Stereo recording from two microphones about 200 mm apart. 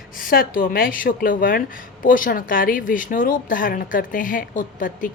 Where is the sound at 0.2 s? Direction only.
45° left (ahead or behind).